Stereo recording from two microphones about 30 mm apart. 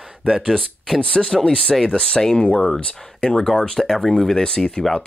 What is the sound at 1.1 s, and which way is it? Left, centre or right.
Speech, left.